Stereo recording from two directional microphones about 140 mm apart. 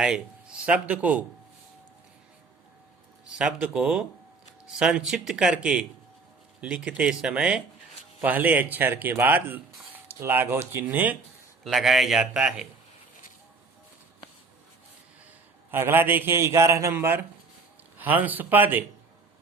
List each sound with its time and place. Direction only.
0.0 s speech: 5° right (ahead or behind)
3.2 s speech: 5° right (ahead or behind)
11.6 s speech: centre (ahead or behind)
15.7 s speech: 15° right (ahead or behind)